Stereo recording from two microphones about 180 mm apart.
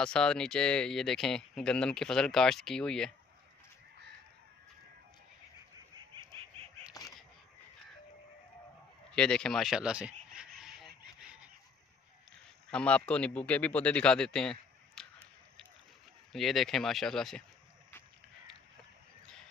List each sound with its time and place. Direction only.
0.0 s speech: 5° left (ahead or behind)
5.9 s frog: 30° right (ahead or behind)
6.9 s bird: 20° left (ahead or behind)
9.1 s a sound: 5° left (ahead or behind)
11.1 s chicken: 5° right (ahead or behind)
12.7 s speech: 5° left (ahead or behind)
16.3 s speech: centre (ahead or behind)